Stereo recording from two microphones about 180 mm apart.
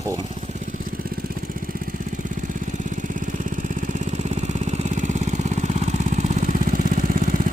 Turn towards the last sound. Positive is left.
turn(degrees=-45)  # may be behind; listen again after turning